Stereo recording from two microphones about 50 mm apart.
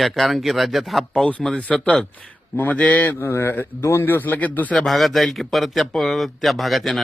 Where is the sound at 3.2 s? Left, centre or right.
Left.